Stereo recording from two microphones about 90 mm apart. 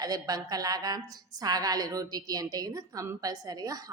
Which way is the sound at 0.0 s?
45° right (ahead or behind).